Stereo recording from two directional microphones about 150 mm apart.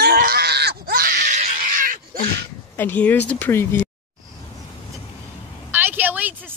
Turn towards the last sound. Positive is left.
turn(degrees=-10)  # may be behind; listen again after turning